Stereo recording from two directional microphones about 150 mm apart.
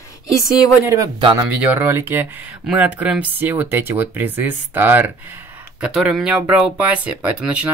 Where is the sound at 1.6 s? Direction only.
10° right (ahead or behind).